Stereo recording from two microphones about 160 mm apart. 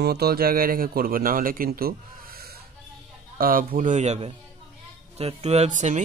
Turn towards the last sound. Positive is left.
turn(degrees=-50)  # may be behind; listen again after turning